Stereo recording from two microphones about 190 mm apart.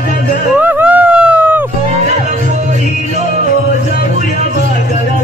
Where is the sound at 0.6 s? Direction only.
10° right (ahead or behind).